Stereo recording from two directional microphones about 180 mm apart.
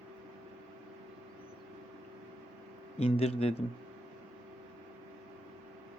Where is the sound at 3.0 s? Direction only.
35° left (ahead or behind).